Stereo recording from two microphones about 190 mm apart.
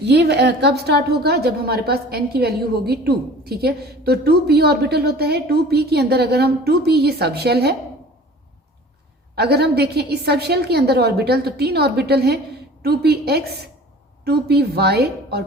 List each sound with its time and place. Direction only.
0.0 s a woman's voice: 60° right (ahead or behind)
9.3 s a woman's voice: 60° right (ahead or behind)